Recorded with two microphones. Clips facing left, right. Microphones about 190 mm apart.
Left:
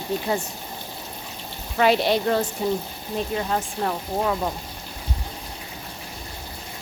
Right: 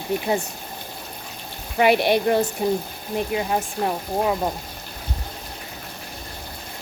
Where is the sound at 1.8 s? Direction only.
15° right (ahead or behind).